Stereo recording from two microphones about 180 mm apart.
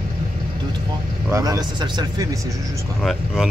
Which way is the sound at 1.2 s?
15° right (ahead or behind).